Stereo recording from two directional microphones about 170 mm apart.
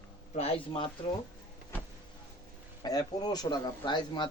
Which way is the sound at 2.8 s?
20° left (ahead or behind).